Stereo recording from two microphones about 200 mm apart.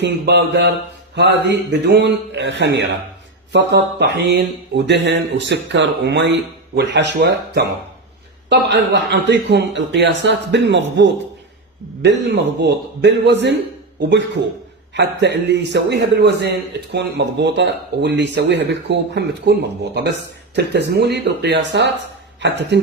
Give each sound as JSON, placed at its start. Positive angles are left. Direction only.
{"t": 0.0, "sound": "a man's voice", "side_deg": -55}
{"t": 14.9, "sound": "a man's voice", "side_deg": -60}